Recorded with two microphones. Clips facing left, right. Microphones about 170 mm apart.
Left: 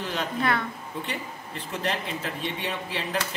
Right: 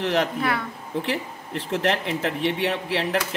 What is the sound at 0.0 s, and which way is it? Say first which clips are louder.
Speech: right 5 dB; 75° right (ahead or behind).